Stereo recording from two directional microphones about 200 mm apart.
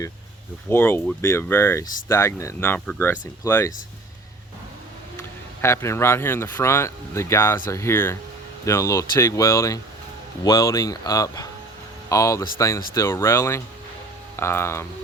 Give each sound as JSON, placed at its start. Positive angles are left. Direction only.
{"t": 0.7, "sound": "speech", "side_deg": 10}
{"t": 5.6, "sound": "speech", "side_deg": 15}